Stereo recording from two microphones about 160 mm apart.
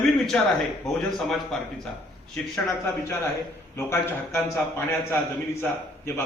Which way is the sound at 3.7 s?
15° left (ahead or behind).